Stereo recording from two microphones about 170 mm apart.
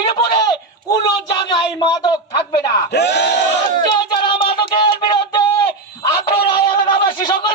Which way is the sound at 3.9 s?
25° left (ahead or behind).